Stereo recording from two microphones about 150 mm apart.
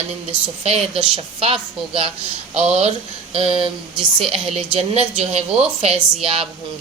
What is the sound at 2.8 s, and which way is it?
Speech, 40° right (ahead or behind).